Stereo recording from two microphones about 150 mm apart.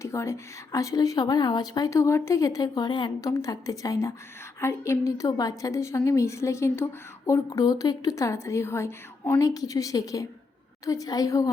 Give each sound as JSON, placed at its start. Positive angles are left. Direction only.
{"t": 0.0, "sound": "speech", "side_deg": 20}